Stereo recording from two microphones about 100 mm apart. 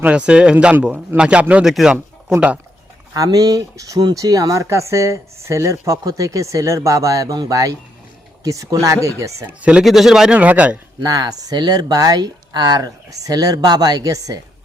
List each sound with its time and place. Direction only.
0.0 s speech: 10° right (ahead or behind)
3.2 s speech: 40° right (ahead or behind)
9.6 s speech: 10° right (ahead or behind)
11.0 s speech: 40° right (ahead or behind)